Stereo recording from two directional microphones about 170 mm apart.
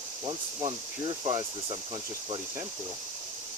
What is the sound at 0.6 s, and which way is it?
Speech, 25° right (ahead or behind).